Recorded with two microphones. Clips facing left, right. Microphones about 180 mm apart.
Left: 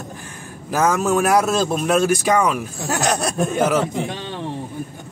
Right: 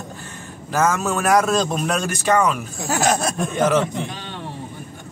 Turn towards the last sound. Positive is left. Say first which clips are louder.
# even
turn(degrees=10)  # may be behind; listen again after turning